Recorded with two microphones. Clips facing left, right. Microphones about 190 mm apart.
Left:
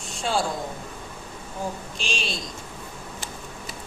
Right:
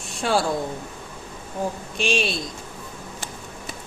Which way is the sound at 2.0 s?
60° right (ahead or behind).